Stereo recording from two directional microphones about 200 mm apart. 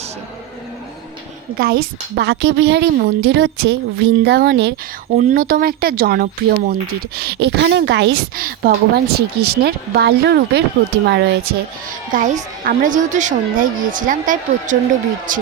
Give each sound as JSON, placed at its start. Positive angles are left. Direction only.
{"t": 1.5, "sound": "a woman's voice", "side_deg": -50}
{"t": 12.1, "sound": "a woman's voice", "side_deg": -40}